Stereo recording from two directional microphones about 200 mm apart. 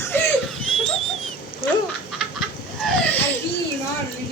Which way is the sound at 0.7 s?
Centre (ahead or behind).